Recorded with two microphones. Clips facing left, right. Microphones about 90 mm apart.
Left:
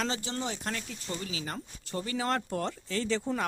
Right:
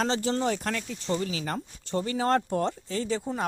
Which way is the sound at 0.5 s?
60° right (ahead or behind).